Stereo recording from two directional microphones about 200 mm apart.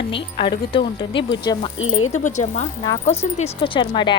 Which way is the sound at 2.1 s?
35° left (ahead or behind).